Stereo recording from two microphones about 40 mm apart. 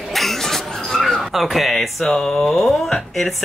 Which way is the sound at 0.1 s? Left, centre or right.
Centre.